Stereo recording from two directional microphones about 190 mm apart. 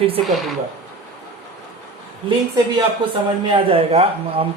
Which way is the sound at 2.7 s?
25° right (ahead or behind).